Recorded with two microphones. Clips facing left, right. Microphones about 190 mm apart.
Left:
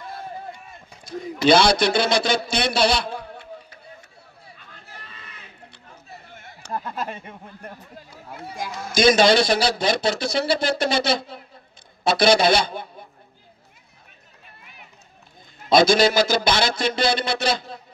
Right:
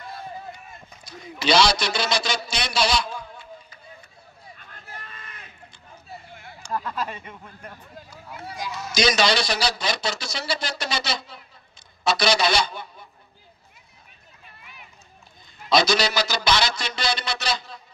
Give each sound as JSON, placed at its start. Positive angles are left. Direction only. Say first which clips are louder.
{"t": 1.0, "sound": "speech", "louder": "left 7 dB", "side_deg": 55}
{"t": 4.6, "sound": "hubbub", "louder": "right 3 dB", "side_deg": -50}
{"t": 6.6, "sound": "a sound", "louder": "right 1 dB", "side_deg": 65}
{"t": 7.0, "sound": "speech", "louder": "left 1 dB", "side_deg": 45}
{"t": 15.7, "sound": "speech", "louder": "left 5 dB", "side_deg": 50}